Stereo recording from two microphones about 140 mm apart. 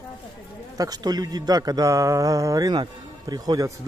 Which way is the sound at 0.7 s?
25° right (ahead or behind).